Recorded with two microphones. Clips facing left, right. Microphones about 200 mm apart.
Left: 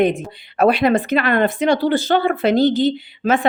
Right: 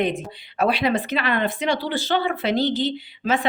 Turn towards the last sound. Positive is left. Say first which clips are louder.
# left 5 dB
turn(degrees=50)  # may be behind; listen again after turning